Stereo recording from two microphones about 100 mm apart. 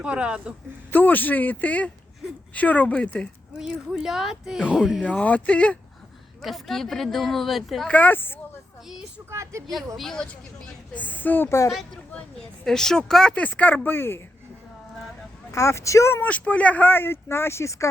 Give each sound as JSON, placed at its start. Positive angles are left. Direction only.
{"t": 0.0, "sound": "a man's voice", "side_deg": -10}
{"t": 0.9, "sound": "speech", "side_deg": 20}
{"t": 3.6, "sound": "speech", "side_deg": -5}
{"t": 5.0, "sound": "speech", "side_deg": 15}
{"t": 6.4, "sound": "speech", "side_deg": 0}
{"t": 7.9, "sound": "speech", "side_deg": 15}
{"t": 9.3, "sound": "a sound", "side_deg": -30}
{"t": 10.0, "sound": "speech", "side_deg": 5}
{"t": 10.9, "sound": "speech", "side_deg": 15}
{"t": 12.4, "sound": "speech", "side_deg": 5}
{"t": 15.5, "sound": "speech", "side_deg": 30}
{"t": 16.2, "sound": "speech", "side_deg": 15}